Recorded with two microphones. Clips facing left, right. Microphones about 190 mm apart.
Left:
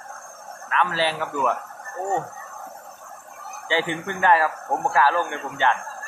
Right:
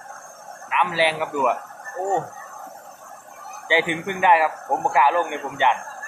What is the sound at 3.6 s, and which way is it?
Speech, 15° right (ahead or behind).